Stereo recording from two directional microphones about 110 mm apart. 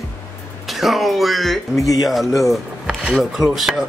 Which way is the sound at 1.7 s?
30° left (ahead or behind).